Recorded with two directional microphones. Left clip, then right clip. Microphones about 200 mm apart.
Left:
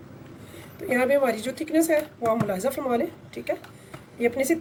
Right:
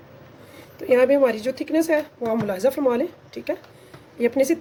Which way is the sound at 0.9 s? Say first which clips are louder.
Right 5 dB; 40° right (ahead or behind).